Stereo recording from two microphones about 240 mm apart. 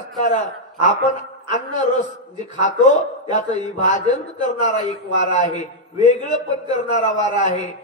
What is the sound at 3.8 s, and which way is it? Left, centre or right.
Speech, left.